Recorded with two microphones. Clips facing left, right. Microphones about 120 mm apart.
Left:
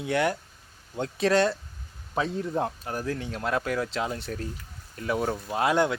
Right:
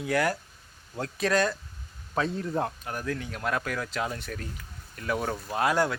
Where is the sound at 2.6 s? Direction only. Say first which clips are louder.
Left 2 dB; 30° left (ahead or behind).